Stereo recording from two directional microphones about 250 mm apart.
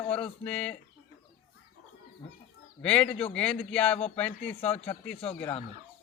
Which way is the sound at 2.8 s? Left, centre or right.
Centre.